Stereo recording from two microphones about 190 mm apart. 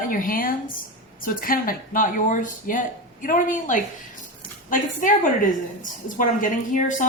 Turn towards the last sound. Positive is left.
turn(degrees=45)  # may be behind; listen again after turning